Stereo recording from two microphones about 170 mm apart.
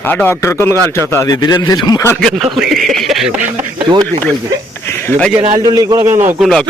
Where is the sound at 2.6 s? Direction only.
Centre (ahead or behind).